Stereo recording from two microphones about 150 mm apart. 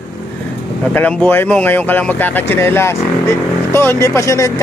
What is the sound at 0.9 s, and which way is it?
Speech, 10° left (ahead or behind).